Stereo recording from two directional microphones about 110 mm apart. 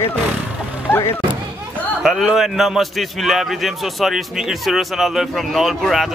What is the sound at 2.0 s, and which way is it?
A man's voice, 5° right (ahead or behind).